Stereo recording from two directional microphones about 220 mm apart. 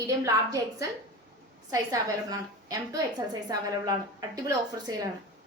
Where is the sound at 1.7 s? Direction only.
15° right (ahead or behind).